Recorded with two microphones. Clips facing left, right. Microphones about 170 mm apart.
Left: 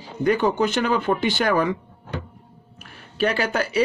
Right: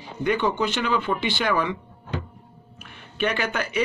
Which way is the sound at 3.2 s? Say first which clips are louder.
Left 3 dB; 35° left (ahead or behind).